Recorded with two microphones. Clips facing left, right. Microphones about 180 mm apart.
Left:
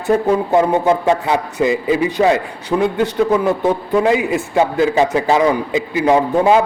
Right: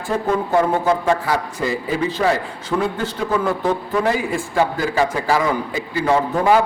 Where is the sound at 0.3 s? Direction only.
20° left (ahead or behind).